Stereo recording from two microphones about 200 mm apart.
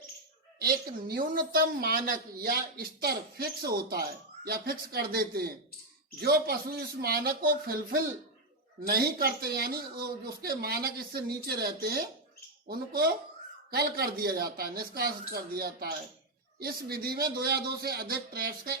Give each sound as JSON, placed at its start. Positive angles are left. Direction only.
{"t": 0.6, "sound": "a woman's voice", "side_deg": -50}